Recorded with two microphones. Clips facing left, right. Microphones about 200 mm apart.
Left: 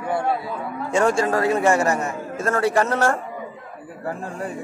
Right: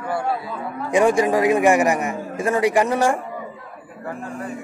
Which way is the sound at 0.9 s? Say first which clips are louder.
Right 3 dB; 15° right (ahead or behind).